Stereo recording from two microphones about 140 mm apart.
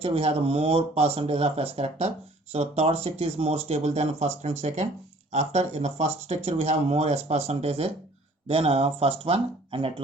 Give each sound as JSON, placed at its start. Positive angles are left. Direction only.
{"t": 0.0, "sound": "speech", "side_deg": -45}